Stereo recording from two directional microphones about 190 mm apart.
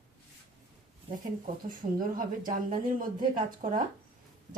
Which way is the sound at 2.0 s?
45° right (ahead or behind).